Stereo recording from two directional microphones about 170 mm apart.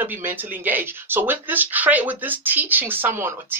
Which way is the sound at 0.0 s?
10° right (ahead or behind).